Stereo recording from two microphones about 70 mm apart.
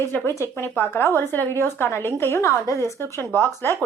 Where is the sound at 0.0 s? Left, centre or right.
Left.